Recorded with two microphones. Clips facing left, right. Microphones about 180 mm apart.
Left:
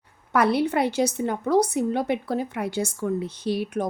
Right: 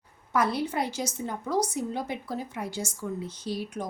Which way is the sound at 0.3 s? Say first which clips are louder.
Left 6 dB; 65° left (ahead or behind).